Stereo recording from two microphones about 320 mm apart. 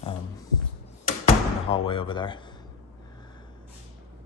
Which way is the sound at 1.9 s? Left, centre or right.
Centre.